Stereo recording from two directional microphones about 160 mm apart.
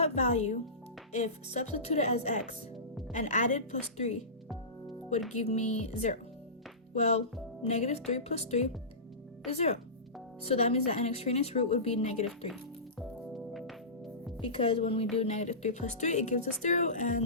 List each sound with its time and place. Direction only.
0.0 s speech: 45° left (ahead or behind)
5.3 s a woman's voice: 45° left (ahead or behind)
13.5 s music: centre (ahead or behind)
14.4 s a woman's voice: 35° left (ahead or behind)